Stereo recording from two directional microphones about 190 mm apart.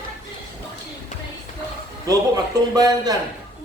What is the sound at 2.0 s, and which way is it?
A man's voice, 20° right (ahead or behind).